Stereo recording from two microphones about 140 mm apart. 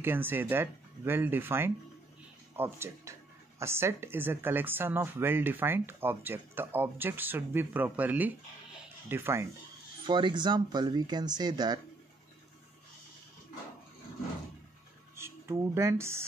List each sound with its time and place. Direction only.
0.0 s speech: 15° right (ahead or behind)
10.0 s speech: 35° right (ahead or behind)
15.1 s speech: 20° right (ahead or behind)